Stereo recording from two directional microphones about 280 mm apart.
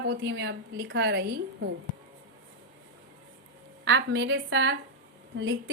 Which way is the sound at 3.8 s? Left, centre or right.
Right.